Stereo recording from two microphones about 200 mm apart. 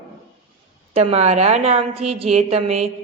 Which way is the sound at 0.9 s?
30° right (ahead or behind).